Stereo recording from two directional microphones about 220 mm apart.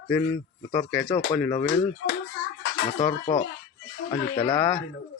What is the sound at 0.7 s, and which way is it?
Speech, 5° left (ahead or behind).